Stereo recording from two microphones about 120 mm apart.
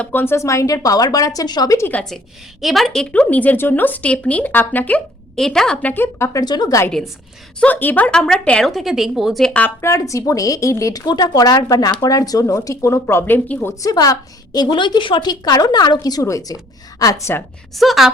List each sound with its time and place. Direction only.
0.0 s a woman's voice: 15° left (ahead or behind)
2.6 s speech: centre (ahead or behind); by 6.4 s 20° left (ahead or behind)
6.4 s a woman's voice: 35° left (ahead or behind)
7.6 s speech: 15° left (ahead or behind)
9.8 s a woman's voice: 25° left (ahead or behind)
13.8 s a woman's voice: 30° left (ahead or behind)
17.7 s a woman's voice: centre (ahead or behind)